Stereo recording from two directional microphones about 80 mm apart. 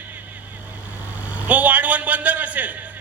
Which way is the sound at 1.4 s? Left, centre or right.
Centre.